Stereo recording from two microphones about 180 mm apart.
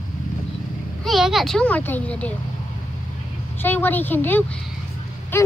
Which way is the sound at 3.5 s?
10° left (ahead or behind).